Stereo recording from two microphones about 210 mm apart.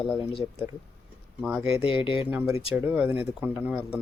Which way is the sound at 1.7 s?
25° left (ahead or behind).